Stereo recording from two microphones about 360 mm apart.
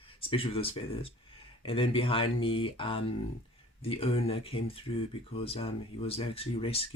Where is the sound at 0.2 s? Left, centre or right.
Centre.